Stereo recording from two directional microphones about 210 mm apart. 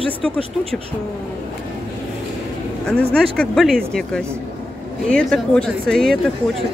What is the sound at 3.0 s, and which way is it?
Speech, 5° left (ahead or behind).